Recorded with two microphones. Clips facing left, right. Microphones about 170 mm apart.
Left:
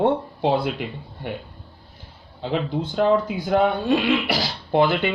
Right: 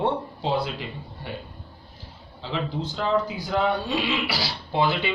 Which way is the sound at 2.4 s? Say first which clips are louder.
Left 5 dB; 55° left (ahead or behind).